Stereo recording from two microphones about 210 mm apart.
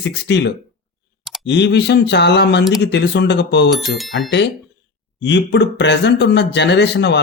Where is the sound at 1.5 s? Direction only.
55° left (ahead or behind).